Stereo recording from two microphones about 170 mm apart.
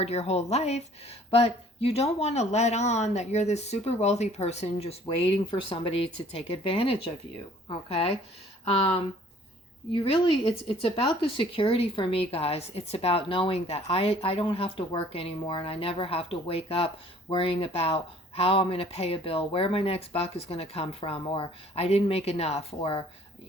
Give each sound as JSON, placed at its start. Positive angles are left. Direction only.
{"t": 0.0, "sound": "speech", "side_deg": 35}